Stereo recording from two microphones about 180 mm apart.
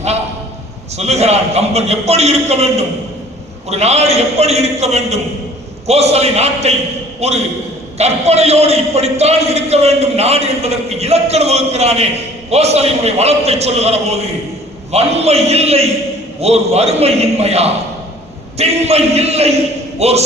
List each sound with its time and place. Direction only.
0.9 s a man's voice: 35° right (ahead or behind)